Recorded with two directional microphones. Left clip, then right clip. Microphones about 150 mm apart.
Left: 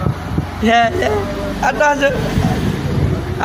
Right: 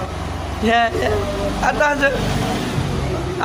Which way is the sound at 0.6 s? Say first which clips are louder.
Left 3 dB; 25° left (ahead or behind).